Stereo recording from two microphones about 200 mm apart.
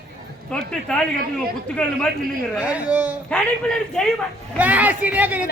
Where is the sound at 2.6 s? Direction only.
5° right (ahead or behind).